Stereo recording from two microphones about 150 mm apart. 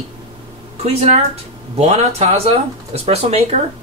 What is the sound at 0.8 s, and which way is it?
Speech, 45° right (ahead or behind).